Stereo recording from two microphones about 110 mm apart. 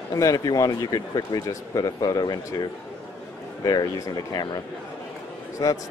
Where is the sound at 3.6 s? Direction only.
40° left (ahead or behind).